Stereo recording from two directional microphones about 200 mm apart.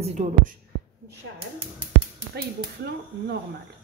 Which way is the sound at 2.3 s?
55° right (ahead or behind).